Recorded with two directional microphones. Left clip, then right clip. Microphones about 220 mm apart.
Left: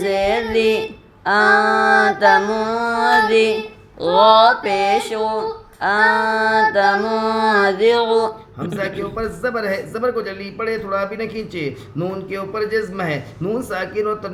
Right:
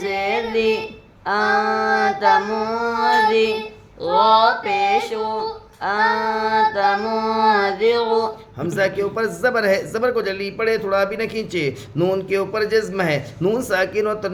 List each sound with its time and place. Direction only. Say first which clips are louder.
0.0 s speech: left 3 dB; 20° left (ahead or behind)
3.2 s child singing: left 2 dB; 20° left (ahead or behind)
4.0 s speech: left 3 dB; 20° left (ahead or behind)
8.6 s speech: right 4 dB; 50° right (ahead or behind)